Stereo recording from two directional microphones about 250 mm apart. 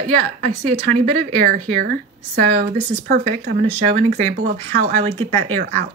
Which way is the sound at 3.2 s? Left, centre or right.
Right.